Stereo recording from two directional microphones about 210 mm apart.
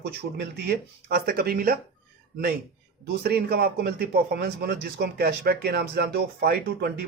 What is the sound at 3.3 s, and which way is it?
A man's voice, 50° right (ahead or behind).